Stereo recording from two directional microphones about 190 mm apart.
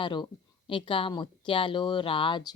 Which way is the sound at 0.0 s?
25° left (ahead or behind).